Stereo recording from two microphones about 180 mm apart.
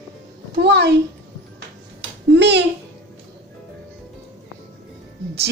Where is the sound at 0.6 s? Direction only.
70° right (ahead or behind).